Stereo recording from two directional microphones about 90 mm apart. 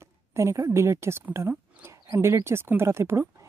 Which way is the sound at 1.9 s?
50° right (ahead or behind).